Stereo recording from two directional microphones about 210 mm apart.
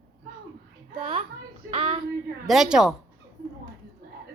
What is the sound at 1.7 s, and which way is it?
Speech, 25° right (ahead or behind).